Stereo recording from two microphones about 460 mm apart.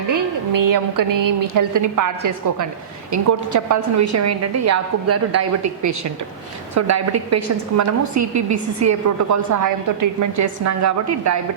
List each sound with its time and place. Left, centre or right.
0.1 s a woman's voice: right